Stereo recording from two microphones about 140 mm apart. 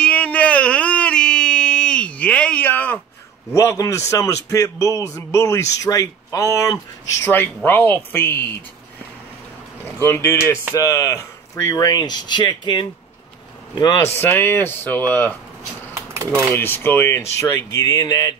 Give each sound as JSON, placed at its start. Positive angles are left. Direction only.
{"t": 0.0, "sound": "a sound", "side_deg": 10}
{"t": 3.5, "sound": "speech", "side_deg": 20}
{"t": 9.9, "sound": "speech", "side_deg": 15}
{"t": 16.1, "sound": "typewriter", "side_deg": -20}
{"t": 16.5, "sound": "speech", "side_deg": 15}